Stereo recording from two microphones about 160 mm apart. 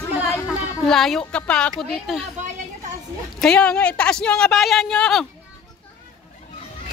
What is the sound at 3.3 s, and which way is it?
Speech, 5° left (ahead or behind).